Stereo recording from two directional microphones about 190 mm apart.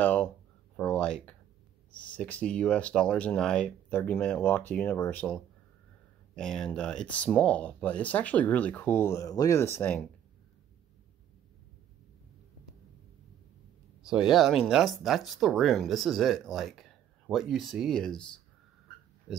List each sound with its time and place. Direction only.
0.0 s a sound: 10° left (ahead or behind)
2.0 s speech: 5° left (ahead or behind)
14.0 s speech: 5° right (ahead or behind)
19.3 s oink: centre (ahead or behind)